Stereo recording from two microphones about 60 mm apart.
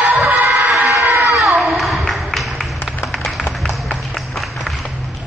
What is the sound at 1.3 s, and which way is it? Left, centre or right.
Music, centre.